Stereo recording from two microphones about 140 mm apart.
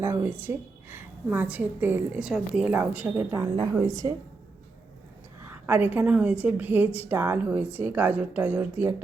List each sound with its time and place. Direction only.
0.0 s a woman's voice: 15° right (ahead or behind)
5.5 s a woman's voice: 15° right (ahead or behind)